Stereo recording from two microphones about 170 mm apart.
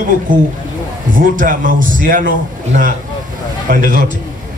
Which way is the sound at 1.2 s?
50° right (ahead or behind).